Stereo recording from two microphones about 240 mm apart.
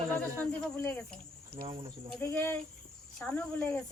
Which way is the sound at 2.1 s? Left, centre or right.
Centre.